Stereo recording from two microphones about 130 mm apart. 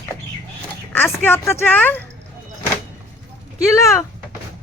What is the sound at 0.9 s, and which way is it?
Speech, 15° left (ahead or behind).